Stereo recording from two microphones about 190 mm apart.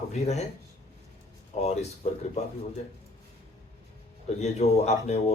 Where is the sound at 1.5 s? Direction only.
35° left (ahead or behind).